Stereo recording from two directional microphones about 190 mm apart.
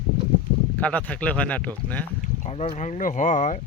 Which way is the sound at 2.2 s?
35° left (ahead or behind).